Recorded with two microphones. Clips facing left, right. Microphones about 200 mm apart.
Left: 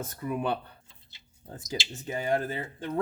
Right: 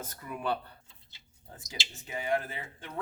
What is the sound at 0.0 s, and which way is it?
Speech, 30° left (ahead or behind).